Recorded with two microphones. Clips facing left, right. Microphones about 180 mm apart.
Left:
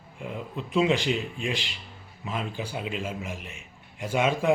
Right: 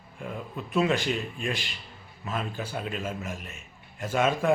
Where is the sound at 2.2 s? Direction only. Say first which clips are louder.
Even; 15° left (ahead or behind).